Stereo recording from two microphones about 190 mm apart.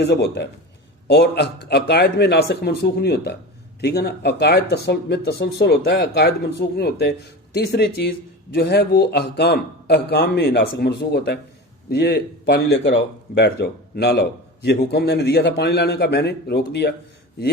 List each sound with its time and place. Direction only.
0.0 s speech: 65° left (ahead or behind)